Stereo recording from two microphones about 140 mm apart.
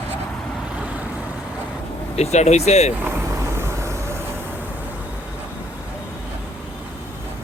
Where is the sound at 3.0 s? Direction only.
15° right (ahead or behind).